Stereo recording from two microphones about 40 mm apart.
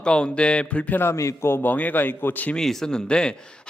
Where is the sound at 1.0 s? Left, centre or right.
Left.